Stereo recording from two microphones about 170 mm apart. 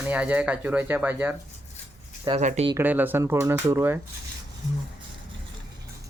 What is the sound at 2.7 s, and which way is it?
Speech, 10° right (ahead or behind).